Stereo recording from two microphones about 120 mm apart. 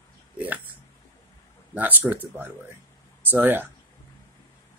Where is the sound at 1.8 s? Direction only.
15° right (ahead or behind).